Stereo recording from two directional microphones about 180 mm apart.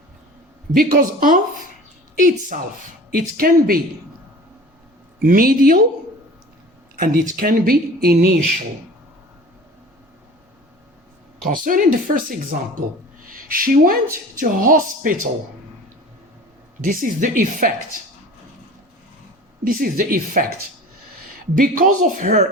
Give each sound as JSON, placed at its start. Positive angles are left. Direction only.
{"t": 0.7, "sound": "speech", "side_deg": -55}
{"t": 2.5, "sound": "speech", "side_deg": -45}
{"t": 5.2, "sound": "speech", "side_deg": -50}
{"t": 7.0, "sound": "speech", "side_deg": -50}
{"t": 11.5, "sound": "speech", "side_deg": -50}
{"t": 16.8, "sound": "speech", "side_deg": -50}
{"t": 19.6, "sound": "speech", "side_deg": -55}
{"t": 21.5, "sound": "speech", "side_deg": -50}